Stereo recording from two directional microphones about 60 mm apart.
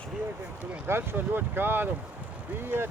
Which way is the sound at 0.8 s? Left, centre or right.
Right.